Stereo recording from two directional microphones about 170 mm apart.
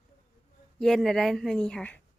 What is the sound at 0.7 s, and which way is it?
A woman's voice, centre (ahead or behind).